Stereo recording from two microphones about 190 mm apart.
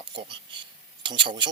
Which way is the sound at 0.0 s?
25° right (ahead or behind).